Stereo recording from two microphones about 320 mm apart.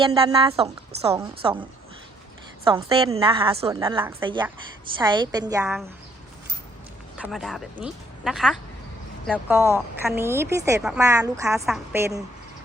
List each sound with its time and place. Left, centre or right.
0.0 s speech: centre
2.6 s speech: centre
7.2 s speech: centre